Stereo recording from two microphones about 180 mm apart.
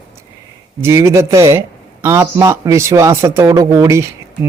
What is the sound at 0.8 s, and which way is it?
A man's voice, 15° right (ahead or behind).